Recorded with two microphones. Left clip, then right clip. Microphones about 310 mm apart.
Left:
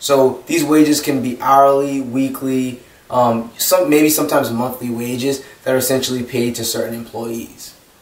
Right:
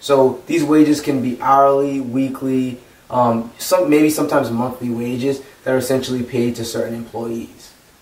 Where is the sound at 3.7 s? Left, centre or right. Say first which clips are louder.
Left 1 dB; centre.